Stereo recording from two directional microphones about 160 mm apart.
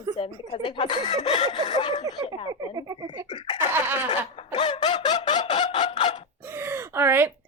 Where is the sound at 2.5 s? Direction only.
25° right (ahead or behind).